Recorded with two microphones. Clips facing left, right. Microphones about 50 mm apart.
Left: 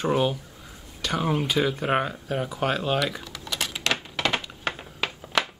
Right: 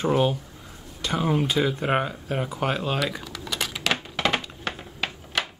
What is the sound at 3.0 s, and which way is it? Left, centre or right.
Typing, centre.